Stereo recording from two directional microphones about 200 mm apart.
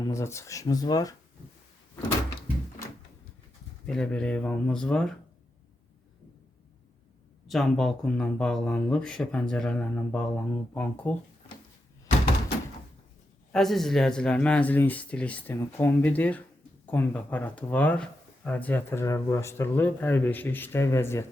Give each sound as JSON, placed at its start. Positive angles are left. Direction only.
{"t": 0.0, "sound": "speech", "side_deg": 15}
{"t": 3.8, "sound": "speech", "side_deg": 5}
{"t": 7.4, "sound": "speech", "side_deg": 0}
{"t": 13.5, "sound": "speech", "side_deg": 0}